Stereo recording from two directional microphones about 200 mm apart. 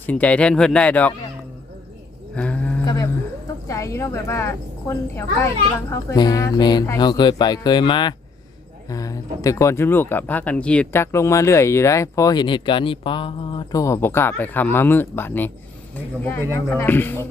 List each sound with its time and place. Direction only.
0.0 s speech: 5° left (ahead or behind)
2.3 s livestock: 5° left (ahead or behind)
3.7 s speech: 15° left (ahead or behind)